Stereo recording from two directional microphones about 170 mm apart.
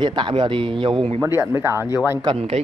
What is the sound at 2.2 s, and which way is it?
Speech, 30° right (ahead or behind).